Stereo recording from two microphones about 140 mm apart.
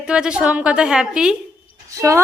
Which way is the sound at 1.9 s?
20° right (ahead or behind).